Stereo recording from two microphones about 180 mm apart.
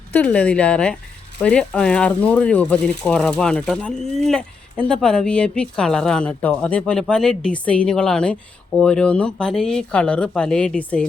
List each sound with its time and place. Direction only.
0.1 s speech: 10° left (ahead or behind)